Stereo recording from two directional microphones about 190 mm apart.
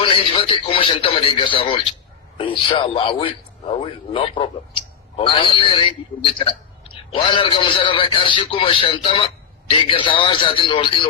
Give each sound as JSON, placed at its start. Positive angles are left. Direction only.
{"t": 0.0, "sound": "a man's voice", "side_deg": 30}